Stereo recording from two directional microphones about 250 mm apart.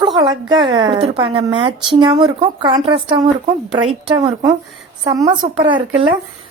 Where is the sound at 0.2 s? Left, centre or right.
Centre.